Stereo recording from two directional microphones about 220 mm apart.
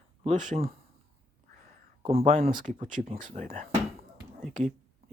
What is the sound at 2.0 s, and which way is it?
Speech, 25° right (ahead or behind).